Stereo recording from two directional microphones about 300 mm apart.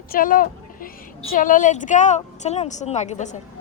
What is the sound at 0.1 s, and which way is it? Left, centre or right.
A woman's voice, left.